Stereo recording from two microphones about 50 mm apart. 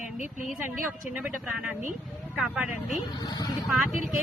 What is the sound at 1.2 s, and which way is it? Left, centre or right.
Speech, right.